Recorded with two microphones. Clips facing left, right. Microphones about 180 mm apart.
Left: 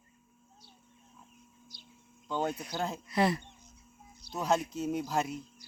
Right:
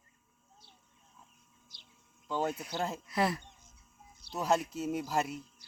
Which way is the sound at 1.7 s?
25° right (ahead or behind).